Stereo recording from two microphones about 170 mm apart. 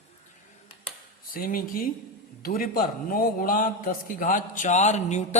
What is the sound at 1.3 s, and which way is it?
A man's voice, 60° left (ahead or behind).